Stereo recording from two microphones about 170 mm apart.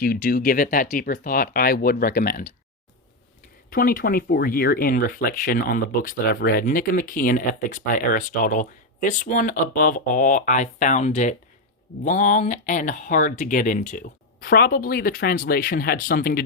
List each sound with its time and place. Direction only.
0.0 s speech: 60° left (ahead or behind)
3.7 s speech: 60° left (ahead or behind)